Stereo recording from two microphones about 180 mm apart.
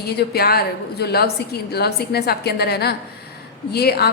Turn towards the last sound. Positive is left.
turn(degrees=60)  # may be behind; listen again after turning